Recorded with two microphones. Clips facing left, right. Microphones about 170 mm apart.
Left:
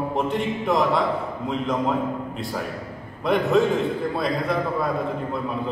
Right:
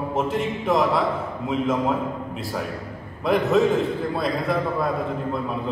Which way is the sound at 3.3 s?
Centre (ahead or behind).